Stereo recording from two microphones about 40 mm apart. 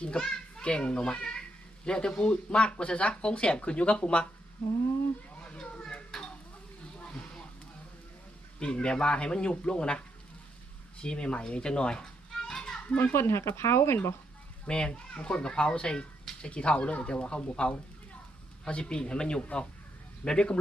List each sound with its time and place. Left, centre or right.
0.0 s a child's voice: left
5.4 s children playing: left
7.0 s a sound: left
8.5 s a child's voice: left
11.0 s a child's voice: left
12.5 s children playing: centre
13.0 s speech: left
14.7 s a child's voice: left